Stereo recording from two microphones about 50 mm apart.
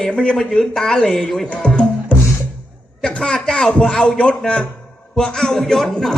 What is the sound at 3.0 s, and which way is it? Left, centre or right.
A man's voice, centre.